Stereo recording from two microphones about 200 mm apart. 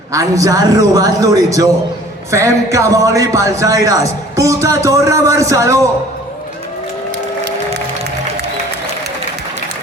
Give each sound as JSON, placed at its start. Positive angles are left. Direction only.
{"t": 0.1, "sound": "speech", "side_deg": -15}